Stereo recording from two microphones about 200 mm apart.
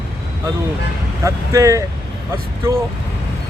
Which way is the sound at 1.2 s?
15° right (ahead or behind).